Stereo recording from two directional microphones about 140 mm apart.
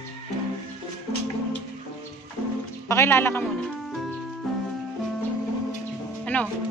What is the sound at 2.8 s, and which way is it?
Speech, 20° left (ahead or behind).